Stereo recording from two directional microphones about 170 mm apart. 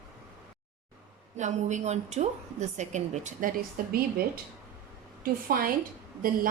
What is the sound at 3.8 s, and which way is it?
Speech, 55° right (ahead or behind).